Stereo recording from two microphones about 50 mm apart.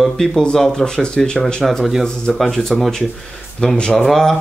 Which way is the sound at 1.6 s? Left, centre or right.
Centre.